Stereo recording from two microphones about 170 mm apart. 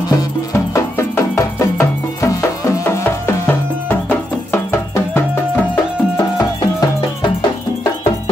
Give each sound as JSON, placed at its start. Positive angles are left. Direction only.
{"t": 0.1, "sound": "music", "side_deg": 15}